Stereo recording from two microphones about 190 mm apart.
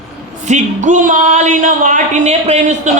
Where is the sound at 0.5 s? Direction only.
40° right (ahead or behind).